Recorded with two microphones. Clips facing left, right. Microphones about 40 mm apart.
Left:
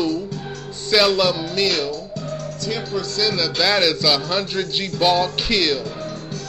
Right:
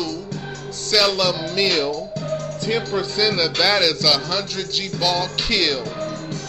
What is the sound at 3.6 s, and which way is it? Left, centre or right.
Music, centre.